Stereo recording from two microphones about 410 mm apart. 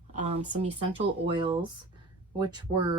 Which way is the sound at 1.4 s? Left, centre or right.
Centre.